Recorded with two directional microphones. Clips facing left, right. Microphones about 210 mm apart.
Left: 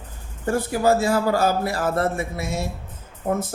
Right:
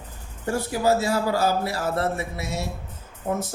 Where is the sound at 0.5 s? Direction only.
50° left (ahead or behind).